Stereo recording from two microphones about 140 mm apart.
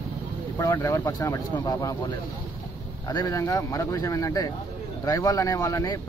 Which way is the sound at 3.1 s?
25° left (ahead or behind).